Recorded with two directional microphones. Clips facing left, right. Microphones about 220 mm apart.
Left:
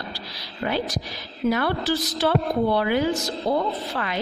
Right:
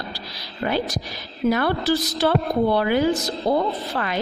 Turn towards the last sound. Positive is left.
turn(degrees=-45)  # may be behind; listen again after turning